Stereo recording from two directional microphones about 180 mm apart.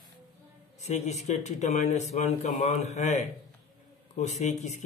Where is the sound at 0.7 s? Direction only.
40° left (ahead or behind).